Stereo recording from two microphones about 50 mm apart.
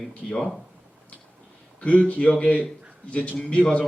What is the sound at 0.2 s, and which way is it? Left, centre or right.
Speech, centre.